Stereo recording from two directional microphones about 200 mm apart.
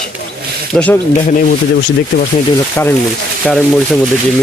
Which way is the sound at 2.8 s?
10° left (ahead or behind).